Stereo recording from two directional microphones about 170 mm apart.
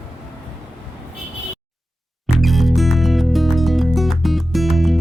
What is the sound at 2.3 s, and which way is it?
Music, centre (ahead or behind).